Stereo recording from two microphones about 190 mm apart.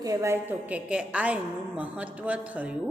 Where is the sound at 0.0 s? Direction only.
15° right (ahead or behind).